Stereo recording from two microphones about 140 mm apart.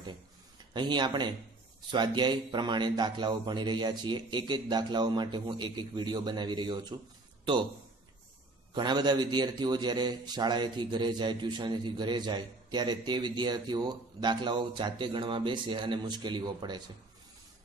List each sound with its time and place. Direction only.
0.7 s a man's voice: 30° right (ahead or behind)
8.7 s a man's voice: 30° right (ahead or behind)